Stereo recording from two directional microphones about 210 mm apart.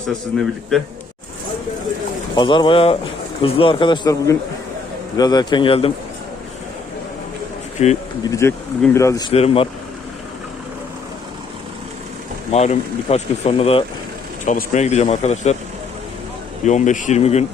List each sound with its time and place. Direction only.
2.3 s speech: 20° left (ahead or behind)
7.8 s speech: 30° left (ahead or behind)
8.2 s speech: 15° left (ahead or behind)
9.3 s speech: 30° left (ahead or behind)
12.5 s speech: 30° left (ahead or behind)
16.6 s speech: 35° left (ahead or behind)